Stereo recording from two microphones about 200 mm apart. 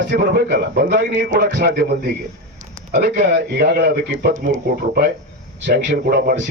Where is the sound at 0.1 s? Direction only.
50° right (ahead or behind).